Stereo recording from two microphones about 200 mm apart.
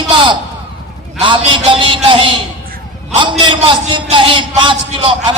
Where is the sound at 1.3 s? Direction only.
25° right (ahead or behind).